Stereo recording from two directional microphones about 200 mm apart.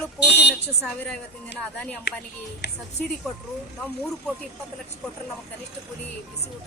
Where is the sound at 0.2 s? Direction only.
55° left (ahead or behind).